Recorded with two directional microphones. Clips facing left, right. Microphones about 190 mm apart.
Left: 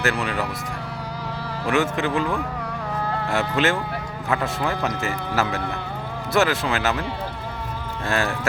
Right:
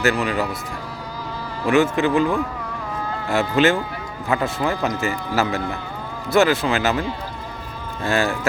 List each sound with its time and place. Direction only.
0.0 s speech: centre (ahead or behind)
1.6 s speech: centre (ahead or behind)
2.9 s a sound: 65° left (ahead or behind)
3.5 s speech: centre (ahead or behind)
8.0 s speech: centre (ahead or behind)